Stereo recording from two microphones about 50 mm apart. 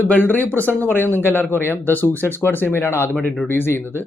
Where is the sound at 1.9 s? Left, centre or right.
Left.